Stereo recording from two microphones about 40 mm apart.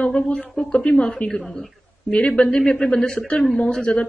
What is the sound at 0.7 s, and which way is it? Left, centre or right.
Speech, left.